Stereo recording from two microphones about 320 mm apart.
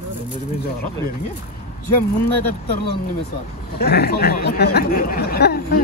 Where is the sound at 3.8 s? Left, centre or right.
Left.